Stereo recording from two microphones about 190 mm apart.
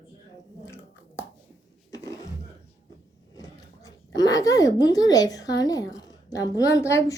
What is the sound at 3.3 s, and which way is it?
Speech, 20° left (ahead or behind).